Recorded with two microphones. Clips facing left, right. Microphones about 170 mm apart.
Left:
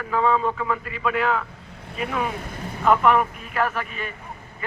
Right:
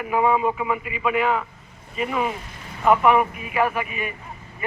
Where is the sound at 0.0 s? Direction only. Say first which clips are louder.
Right 1 dB; 15° right (ahead or behind).